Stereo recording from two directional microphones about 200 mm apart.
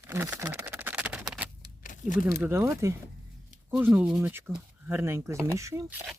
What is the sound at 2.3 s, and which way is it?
Speech, 10° right (ahead or behind).